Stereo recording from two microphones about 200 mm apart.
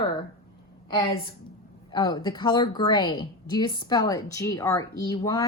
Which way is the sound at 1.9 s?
20° left (ahead or behind).